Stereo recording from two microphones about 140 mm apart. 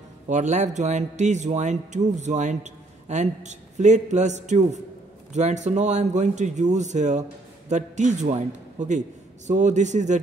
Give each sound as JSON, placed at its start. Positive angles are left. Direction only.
{"t": 0.3, "sound": "speech", "side_deg": -60}